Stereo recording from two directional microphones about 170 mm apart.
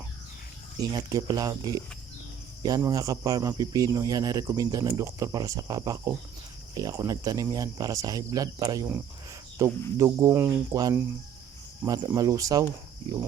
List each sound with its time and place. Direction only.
0.8 s speech: 20° right (ahead or behind)